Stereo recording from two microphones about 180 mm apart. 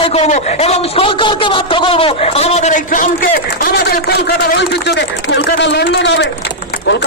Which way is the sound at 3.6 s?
60° left (ahead or behind).